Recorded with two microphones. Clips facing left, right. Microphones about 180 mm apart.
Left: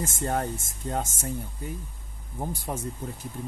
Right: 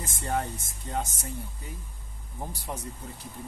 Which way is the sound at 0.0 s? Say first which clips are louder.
Left 3 dB; 45° left (ahead or behind).